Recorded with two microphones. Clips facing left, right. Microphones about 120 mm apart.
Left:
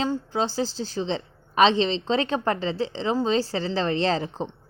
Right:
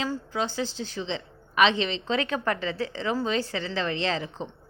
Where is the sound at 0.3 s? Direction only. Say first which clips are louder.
Left 2 dB; 35° left (ahead or behind).